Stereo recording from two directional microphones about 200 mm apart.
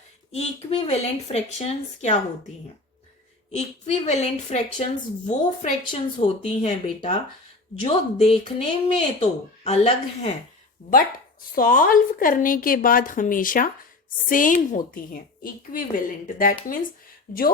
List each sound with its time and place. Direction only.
0.3 s speech: 30° left (ahead or behind)
3.5 s speech: 35° left (ahead or behind)
10.8 s a woman's voice: 50° left (ahead or behind)